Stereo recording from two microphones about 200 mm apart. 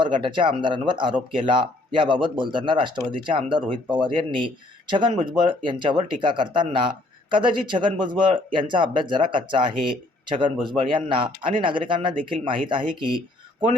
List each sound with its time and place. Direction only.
0.0 s speech: 25° right (ahead or behind)